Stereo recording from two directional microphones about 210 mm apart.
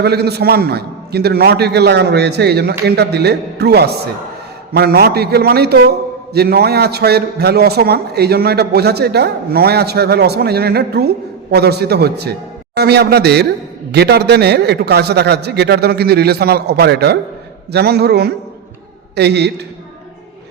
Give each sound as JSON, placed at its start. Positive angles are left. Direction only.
{"t": 0.0, "sound": "a man's voice", "side_deg": -50}